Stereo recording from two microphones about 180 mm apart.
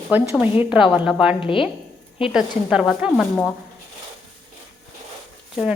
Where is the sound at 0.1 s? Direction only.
10° right (ahead or behind).